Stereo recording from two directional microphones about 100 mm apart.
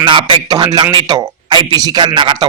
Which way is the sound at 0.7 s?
45° right (ahead or behind).